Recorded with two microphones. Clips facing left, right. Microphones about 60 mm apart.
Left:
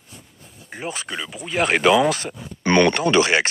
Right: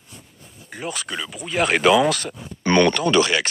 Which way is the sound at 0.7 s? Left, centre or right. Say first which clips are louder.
Even; left.